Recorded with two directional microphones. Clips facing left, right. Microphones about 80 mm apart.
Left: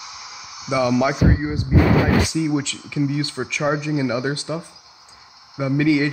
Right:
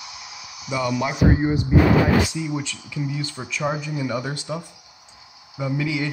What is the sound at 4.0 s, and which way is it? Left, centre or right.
Speech, left.